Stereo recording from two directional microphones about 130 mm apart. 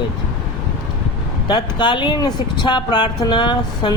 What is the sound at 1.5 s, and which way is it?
Speech, 35° left (ahead or behind).